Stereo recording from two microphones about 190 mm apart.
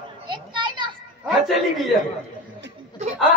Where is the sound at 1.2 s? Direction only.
Centre (ahead or behind).